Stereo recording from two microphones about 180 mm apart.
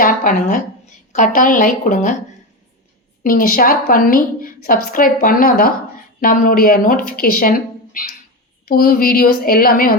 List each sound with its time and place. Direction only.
0.0 s a woman's voice: 50° left (ahead or behind)
3.2 s a woman's voice: 55° left (ahead or behind)